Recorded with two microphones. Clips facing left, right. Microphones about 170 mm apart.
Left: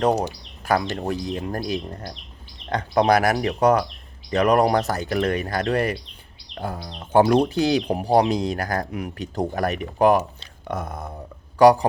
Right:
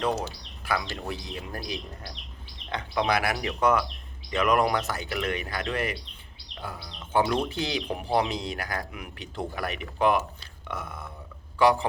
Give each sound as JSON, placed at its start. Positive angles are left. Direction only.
{"t": 0.0, "sound": "speech", "side_deg": 40}